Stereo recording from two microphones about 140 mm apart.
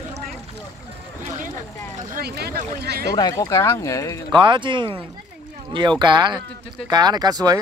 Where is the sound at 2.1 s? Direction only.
80° right.